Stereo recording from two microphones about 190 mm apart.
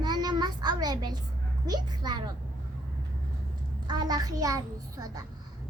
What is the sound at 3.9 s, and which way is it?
A child's voice, 20° right (ahead or behind).